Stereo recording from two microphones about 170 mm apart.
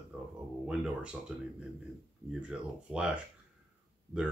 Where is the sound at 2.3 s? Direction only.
5° right (ahead or behind).